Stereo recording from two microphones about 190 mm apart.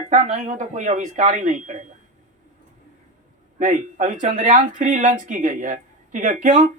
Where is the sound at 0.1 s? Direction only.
40° right (ahead or behind).